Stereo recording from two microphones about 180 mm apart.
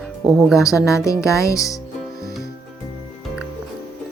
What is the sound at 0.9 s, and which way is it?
Music, 15° left (ahead or behind).